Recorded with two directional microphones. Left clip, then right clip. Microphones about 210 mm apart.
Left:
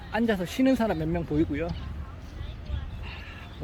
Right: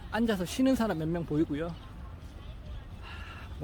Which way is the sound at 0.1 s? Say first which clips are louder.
Left 4 dB; 10° right (ahead or behind).